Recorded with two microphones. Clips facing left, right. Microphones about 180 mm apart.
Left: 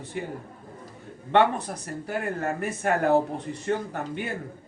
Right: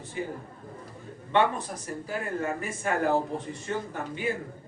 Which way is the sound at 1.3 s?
65° left (ahead or behind).